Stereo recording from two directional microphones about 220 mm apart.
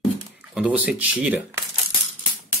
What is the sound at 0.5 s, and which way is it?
Speech, 5° right (ahead or behind).